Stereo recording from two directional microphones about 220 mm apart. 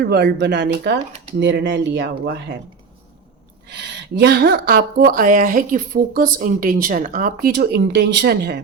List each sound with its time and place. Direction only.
0.0 s speech: 45° right (ahead or behind)
3.7 s speech: 50° right (ahead or behind)